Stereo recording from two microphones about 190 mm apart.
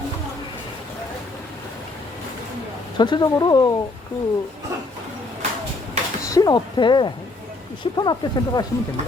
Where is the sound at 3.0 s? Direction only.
25° left (ahead or behind).